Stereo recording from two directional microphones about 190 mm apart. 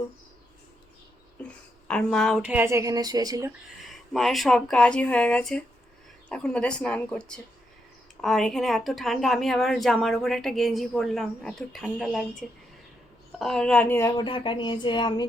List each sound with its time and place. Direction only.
1.4 s a sound: 5° left (ahead or behind)
1.9 s a woman's voice: 5° left (ahead or behind)
2.5 s speech: 10° right (ahead or behind)
3.8 s a woman's voice: centre (ahead or behind)
14.2 s speech: 25° left (ahead or behind)